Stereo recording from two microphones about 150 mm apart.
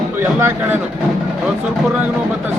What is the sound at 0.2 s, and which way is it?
Speech, 15° right (ahead or behind).